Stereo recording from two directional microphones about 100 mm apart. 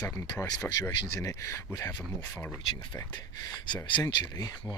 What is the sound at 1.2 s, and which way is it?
Speech, 35° left (ahead or behind).